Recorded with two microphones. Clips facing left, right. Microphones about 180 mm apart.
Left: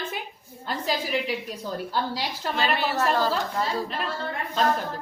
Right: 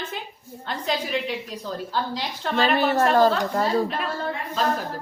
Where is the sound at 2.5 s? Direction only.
45° right (ahead or behind).